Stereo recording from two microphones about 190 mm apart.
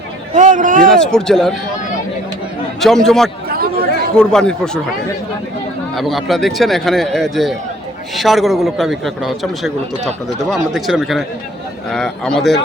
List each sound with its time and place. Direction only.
0.3 s a man's voice: 40° right (ahead or behind)
0.9 s a man's voice: 5° left (ahead or behind)
2.8 s a man's voice: centre (ahead or behind)
3.5 s chatter: 50° right (ahead or behind)
4.1 s a man's voice: 5° left (ahead or behind)
6.0 s a man's voice: centre (ahead or behind)